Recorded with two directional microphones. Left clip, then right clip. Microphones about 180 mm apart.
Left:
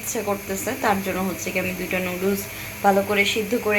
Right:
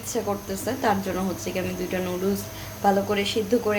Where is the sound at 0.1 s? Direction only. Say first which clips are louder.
Left 2 dB; 5° right (ahead or behind).